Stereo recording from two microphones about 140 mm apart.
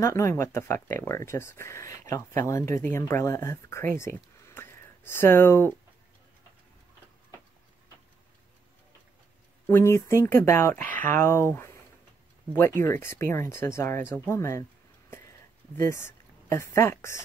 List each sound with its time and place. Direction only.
0.0 s speech: 20° left (ahead or behind)
9.7 s speech: 15° left (ahead or behind)
15.8 s speech: 20° left (ahead or behind)